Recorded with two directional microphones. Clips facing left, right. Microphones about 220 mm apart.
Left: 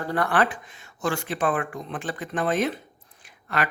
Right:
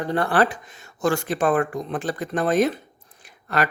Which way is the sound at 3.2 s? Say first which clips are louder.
Right 4 dB; 40° right (ahead or behind).